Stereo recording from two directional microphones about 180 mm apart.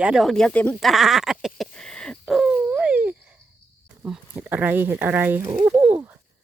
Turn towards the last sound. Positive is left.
turn(degrees=-10)  # may be behind; listen again after turning